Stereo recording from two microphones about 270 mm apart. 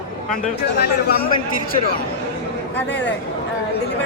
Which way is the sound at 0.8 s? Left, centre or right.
Left.